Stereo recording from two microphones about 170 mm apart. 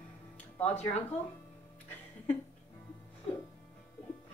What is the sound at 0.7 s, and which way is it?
Speech, 40° left (ahead or behind).